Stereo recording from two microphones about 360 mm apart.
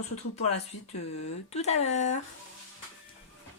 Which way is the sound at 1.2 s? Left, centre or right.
Centre.